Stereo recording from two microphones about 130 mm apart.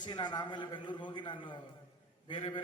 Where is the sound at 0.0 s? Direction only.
35° left (ahead or behind).